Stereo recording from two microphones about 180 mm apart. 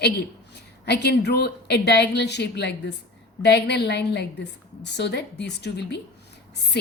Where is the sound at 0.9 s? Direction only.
70° left (ahead or behind).